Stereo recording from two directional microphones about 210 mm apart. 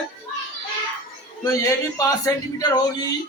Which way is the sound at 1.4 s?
15° left (ahead or behind).